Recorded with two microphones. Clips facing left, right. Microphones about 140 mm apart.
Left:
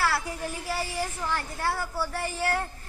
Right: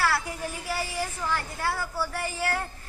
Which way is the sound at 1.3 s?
20° left (ahead or behind).